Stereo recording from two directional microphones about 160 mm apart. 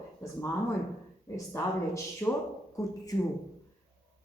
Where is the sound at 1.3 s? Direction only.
20° left (ahead or behind).